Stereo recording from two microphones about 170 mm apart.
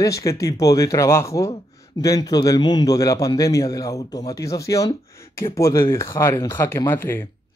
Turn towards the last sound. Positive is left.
turn(degrees=15)  # may be behind; listen again after turning